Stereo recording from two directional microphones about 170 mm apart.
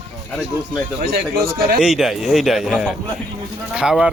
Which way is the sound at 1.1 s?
65° right (ahead or behind).